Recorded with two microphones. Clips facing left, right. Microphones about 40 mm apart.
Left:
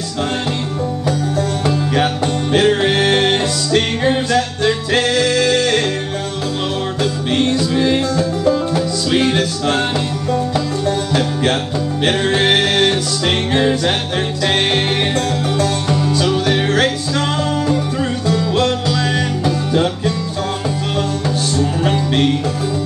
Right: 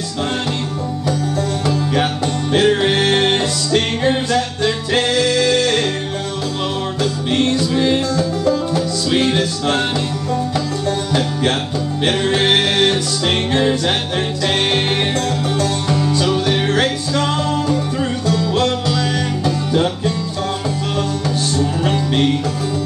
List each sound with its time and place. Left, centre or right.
2.5 s music: centre
7.3 s music: centre
8.2 s music: centre
9.1 s music: centre
12.0 s music: centre
15.9 s music: centre
21.8 s music: centre